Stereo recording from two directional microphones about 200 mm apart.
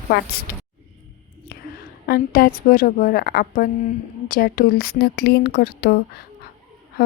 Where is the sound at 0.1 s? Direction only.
50° left (ahead or behind).